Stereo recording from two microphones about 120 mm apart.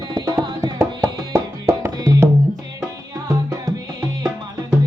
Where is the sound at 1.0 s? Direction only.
25° right (ahead or behind).